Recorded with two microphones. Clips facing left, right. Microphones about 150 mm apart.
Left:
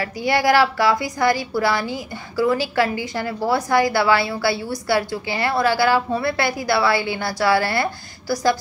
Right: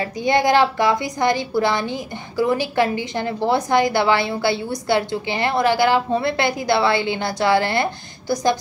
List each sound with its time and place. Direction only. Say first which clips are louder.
0.0 s a woman's voice: right 1 dB; 20° right (ahead or behind)